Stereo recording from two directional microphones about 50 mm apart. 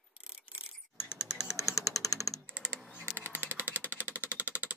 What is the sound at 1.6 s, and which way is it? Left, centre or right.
Typewriter, left.